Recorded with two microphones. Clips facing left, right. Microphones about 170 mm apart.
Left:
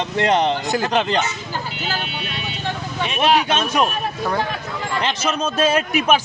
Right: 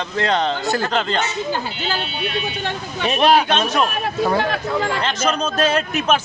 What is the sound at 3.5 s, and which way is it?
Speech, 10° left (ahead or behind).